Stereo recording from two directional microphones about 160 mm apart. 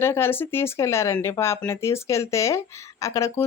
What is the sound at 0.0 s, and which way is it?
Speech, 15° left (ahead or behind).